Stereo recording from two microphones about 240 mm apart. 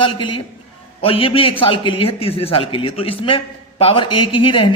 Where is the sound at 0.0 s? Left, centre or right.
Left.